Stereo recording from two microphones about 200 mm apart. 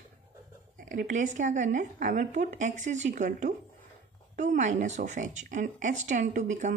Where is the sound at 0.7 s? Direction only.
40° right (ahead or behind).